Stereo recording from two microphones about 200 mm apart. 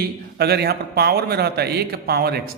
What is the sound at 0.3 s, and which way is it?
Speech, 55° right (ahead or behind).